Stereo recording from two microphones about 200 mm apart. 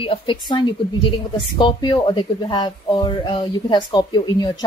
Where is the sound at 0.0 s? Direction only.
25° left (ahead or behind).